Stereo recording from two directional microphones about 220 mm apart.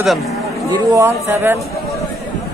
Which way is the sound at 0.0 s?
Centre (ahead or behind).